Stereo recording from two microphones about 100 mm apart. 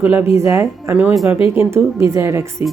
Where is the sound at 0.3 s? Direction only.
25° right (ahead or behind).